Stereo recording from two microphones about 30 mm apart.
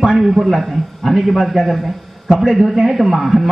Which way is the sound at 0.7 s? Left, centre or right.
Centre.